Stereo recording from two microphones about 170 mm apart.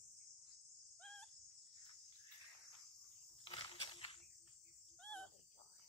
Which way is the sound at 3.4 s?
30° left (ahead or behind).